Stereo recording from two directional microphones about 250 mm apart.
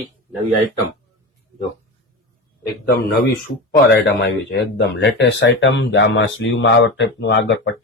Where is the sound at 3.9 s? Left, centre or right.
Left.